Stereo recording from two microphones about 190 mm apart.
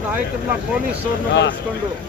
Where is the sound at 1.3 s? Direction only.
65° left (ahead or behind).